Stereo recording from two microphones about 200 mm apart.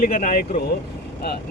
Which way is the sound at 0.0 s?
40° left (ahead or behind).